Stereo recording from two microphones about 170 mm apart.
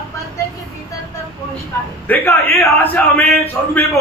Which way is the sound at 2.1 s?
10° left (ahead or behind).